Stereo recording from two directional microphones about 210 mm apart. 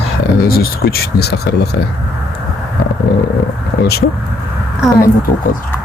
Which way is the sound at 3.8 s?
50° left (ahead or behind).